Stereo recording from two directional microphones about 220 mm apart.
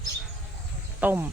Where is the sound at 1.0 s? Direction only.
10° right (ahead or behind).